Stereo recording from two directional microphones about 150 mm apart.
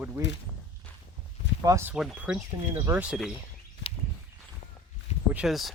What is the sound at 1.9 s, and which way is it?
Speech, 5° right (ahead or behind).